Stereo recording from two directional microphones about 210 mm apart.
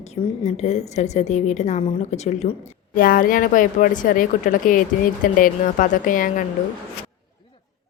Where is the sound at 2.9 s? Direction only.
45° left (ahead or behind).